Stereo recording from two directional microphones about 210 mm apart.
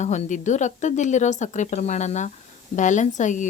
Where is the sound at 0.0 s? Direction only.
35° left (ahead or behind).